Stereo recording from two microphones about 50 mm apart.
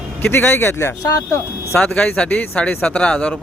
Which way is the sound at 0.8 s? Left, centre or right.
Left.